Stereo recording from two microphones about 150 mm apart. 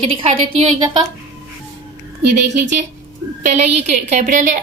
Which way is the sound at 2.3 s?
55° right (ahead or behind).